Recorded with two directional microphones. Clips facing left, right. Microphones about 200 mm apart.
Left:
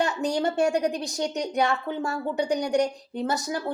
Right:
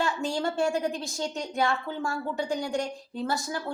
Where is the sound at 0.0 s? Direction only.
20° left (ahead or behind).